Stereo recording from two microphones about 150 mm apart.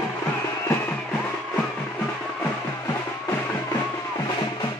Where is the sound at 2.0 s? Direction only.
15° left (ahead or behind).